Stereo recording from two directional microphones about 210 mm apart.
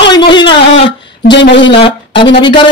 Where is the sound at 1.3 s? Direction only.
55° left (ahead or behind).